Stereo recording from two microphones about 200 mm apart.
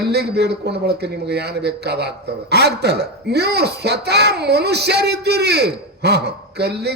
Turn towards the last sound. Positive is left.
turn(degrees=-55)  # may be behind; listen again after turning